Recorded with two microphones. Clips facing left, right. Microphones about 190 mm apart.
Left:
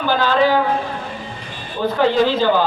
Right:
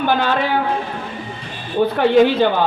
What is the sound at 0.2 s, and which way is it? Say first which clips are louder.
Speech: left 3 dB; 60° right (ahead or behind).